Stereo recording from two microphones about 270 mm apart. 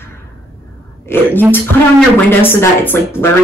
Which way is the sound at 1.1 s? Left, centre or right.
Centre.